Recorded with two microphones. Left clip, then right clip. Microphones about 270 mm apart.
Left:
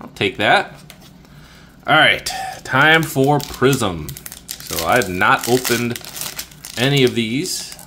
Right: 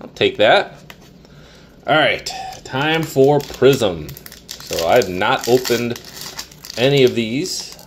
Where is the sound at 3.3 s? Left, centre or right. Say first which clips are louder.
Right 3 dB; left.